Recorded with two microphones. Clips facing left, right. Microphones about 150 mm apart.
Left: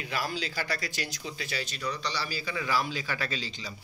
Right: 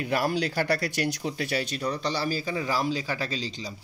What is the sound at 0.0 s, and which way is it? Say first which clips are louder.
Speech: right 7 dB; 55° right (ahead or behind).